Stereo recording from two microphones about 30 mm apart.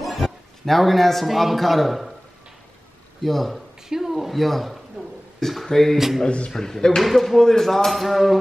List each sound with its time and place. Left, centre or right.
0.0 s a sound: centre
1.2 s speech: centre
3.2 s speech: centre
3.9 s speech: centre
4.4 s speech: centre
5.4 s a sound: centre
5.7 s speech: centre
5.9 s speech: centre
6.5 s speech: centre
7.0 s speech: centre